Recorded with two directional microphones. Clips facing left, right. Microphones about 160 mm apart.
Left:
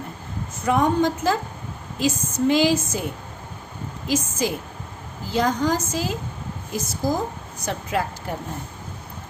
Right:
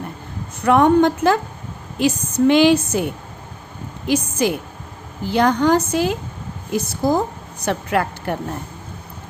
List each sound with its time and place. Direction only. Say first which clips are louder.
0.6 s a woman's voice: right 6 dB; 65° right (ahead or behind)
4.0 s a woman's voice: right 5 dB; 65° right (ahead or behind)